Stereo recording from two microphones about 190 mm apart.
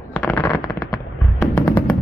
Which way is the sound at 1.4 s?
10° left (ahead or behind).